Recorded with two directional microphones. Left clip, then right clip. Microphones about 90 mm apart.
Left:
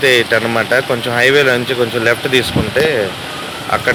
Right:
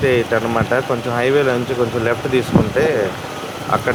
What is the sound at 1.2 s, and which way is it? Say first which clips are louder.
Speech: left 5 dB; 10° right (ahead or behind).